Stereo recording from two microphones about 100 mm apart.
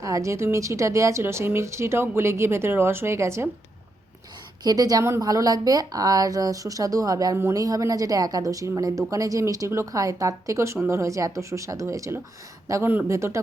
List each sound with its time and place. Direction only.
0.0 s speech: 30° right (ahead or behind)
4.6 s speech: 40° right (ahead or behind)